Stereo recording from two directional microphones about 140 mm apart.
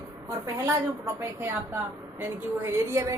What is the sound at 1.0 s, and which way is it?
A woman's voice, 15° right (ahead or behind).